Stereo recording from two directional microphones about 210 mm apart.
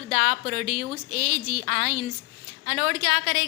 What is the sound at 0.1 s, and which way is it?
Speech, 35° right (ahead or behind).